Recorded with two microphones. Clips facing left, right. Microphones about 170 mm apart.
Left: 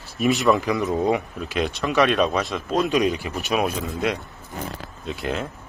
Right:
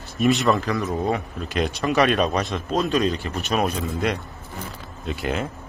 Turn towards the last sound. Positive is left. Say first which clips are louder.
# right 1 dB
turn(degrees=0)  # may be behind; listen again after turning